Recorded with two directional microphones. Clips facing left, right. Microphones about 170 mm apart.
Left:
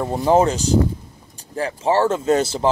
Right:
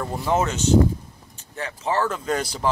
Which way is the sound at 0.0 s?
30° left (ahead or behind).